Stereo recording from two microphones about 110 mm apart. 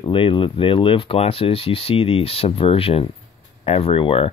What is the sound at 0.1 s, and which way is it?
Speech, 50° left (ahead or behind).